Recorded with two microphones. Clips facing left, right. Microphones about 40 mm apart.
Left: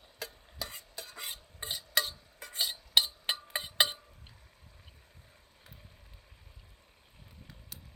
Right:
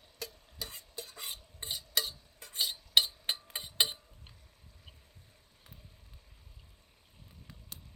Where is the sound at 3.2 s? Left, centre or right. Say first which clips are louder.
Left 3 dB; left.